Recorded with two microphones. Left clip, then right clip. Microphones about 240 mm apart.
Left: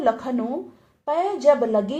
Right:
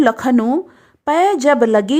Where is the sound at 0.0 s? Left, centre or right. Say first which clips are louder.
Right 8 dB; right.